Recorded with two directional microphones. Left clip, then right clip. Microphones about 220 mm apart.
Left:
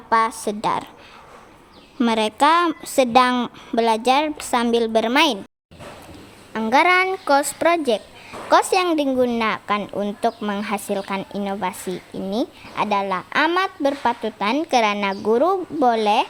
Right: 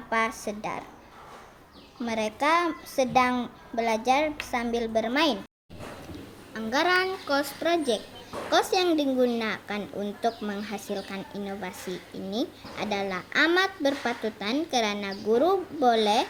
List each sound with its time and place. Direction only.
0.1 s speech: 50° left (ahead or behind)
2.0 s speech: 50° left (ahead or behind)
6.5 s speech: 45° left (ahead or behind)